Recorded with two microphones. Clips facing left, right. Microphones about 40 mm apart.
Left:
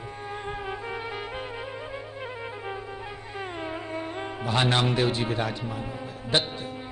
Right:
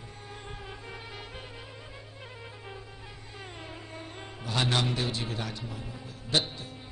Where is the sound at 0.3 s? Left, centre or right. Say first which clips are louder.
Left 10 dB; left.